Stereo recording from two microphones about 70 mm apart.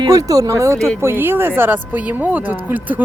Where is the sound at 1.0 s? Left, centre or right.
Right.